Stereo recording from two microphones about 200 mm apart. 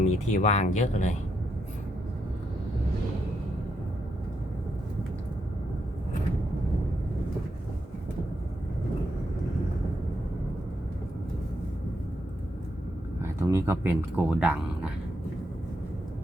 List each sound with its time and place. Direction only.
0.0 s speech: 35° left (ahead or behind)
13.2 s speech: 15° right (ahead or behind)